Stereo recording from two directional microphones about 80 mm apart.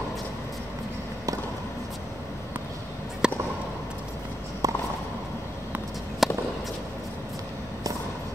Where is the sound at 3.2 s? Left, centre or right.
Centre.